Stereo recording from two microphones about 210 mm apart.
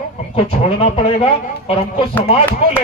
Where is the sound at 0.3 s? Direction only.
25° left (ahead or behind).